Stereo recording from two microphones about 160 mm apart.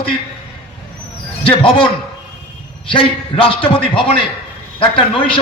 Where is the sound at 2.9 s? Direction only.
35° left (ahead or behind).